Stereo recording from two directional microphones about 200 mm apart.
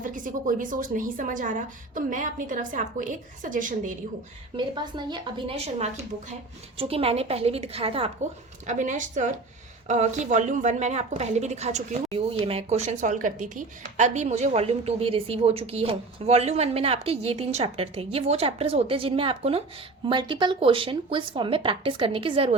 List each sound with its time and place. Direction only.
0.0 s a woman's voice: 40° right (ahead or behind)
4.5 s a woman's voice: 25° right (ahead or behind)
8.6 s a woman's voice: 40° right (ahead or behind)